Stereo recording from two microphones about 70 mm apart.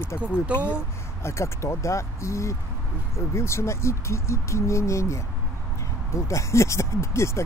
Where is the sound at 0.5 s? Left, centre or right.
Centre.